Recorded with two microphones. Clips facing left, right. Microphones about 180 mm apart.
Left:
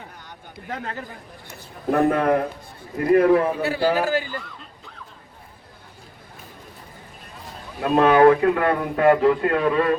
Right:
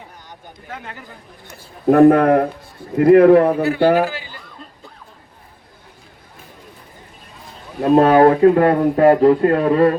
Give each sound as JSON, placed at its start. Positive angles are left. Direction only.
{"t": 1.9, "sound": "a man's voice", "side_deg": -55}
{"t": 4.0, "sound": "a man's voice", "side_deg": 45}
{"t": 7.8, "sound": "speech", "side_deg": -35}